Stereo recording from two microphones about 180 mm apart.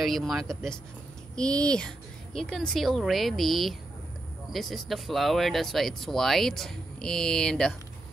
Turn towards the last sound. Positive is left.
turn(degrees=5)  # may be behind; listen again after turning